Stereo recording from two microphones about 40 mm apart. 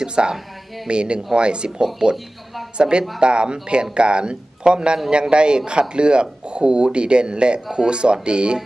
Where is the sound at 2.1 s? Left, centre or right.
Centre.